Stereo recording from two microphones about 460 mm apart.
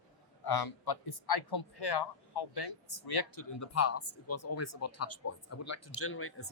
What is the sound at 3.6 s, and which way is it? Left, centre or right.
Speech, left.